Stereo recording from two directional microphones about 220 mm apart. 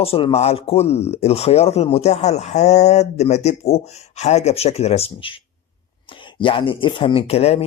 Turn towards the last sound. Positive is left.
turn(degrees=30)  # may be behind; listen again after turning